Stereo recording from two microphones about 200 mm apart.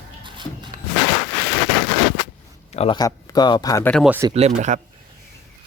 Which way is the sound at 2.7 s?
25° left (ahead or behind).